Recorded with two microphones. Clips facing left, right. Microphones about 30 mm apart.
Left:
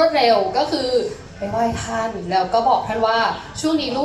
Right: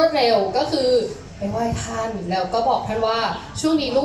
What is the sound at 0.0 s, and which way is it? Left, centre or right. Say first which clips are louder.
A woman's voice: left 2 dB; centre.